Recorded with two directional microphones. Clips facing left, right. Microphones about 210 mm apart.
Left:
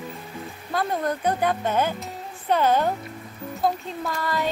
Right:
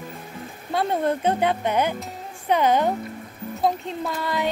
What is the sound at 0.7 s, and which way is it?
Speech, 25° right (ahead or behind).